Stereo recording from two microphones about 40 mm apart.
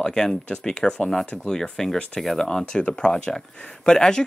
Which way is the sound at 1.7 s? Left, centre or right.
Centre.